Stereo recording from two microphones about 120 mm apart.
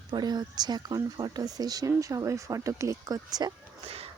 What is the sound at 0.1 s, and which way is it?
Speech, 35° right (ahead or behind).